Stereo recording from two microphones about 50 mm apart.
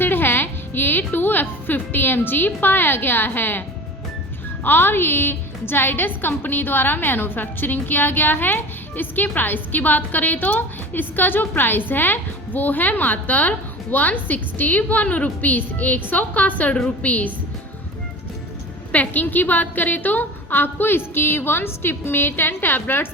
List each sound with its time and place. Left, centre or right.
0.0 s a woman's voice: left
4.6 s a woman's voice: left
18.9 s a woman's voice: left